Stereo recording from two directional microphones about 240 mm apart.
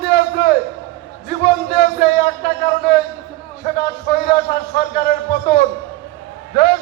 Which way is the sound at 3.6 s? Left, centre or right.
Left.